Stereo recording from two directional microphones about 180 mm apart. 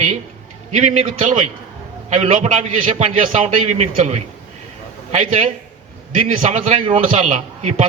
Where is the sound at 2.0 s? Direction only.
40° right (ahead or behind).